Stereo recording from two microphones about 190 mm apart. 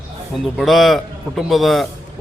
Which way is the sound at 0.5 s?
Centre (ahead or behind).